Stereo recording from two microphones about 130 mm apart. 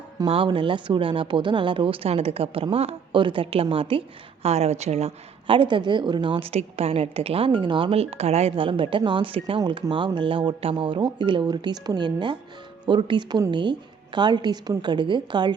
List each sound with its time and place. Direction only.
0.3 s speech: 45° right (ahead or behind)
4.4 s speech: 55° right (ahead or behind); by 6.5 s 40° right (ahead or behind)
6.5 s speech: 50° right (ahead or behind)
9.6 s speech: 30° right (ahead or behind)